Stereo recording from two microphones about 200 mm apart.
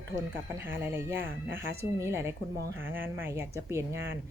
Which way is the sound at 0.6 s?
10° right (ahead or behind).